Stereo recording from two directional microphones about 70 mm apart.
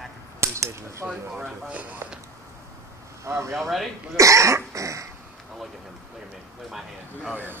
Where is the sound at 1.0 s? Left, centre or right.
Right.